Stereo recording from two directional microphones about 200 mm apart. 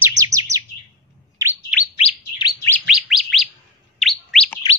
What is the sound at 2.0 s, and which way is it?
Chirp, 25° left (ahead or behind).